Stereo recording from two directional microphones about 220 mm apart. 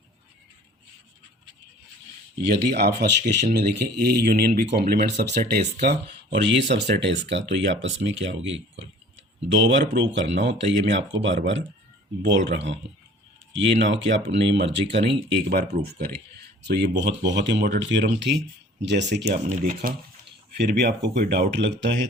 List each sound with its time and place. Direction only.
2.4 s speech: 50° right (ahead or behind)
19.3 s speech: 40° right (ahead or behind)
20.6 s speech: 50° right (ahead or behind)